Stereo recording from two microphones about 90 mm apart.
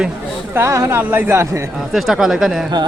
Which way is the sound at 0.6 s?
35° right (ahead or behind).